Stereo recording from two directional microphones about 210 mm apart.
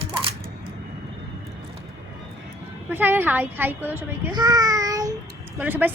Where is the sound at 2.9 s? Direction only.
10° right (ahead or behind).